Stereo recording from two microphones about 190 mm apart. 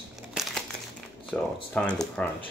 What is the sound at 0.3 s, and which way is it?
Crumpling, centre (ahead or behind).